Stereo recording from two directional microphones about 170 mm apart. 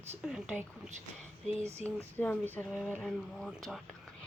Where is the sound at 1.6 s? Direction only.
15° right (ahead or behind).